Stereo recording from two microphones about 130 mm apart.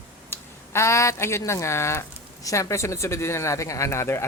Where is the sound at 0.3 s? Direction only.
20° left (ahead or behind).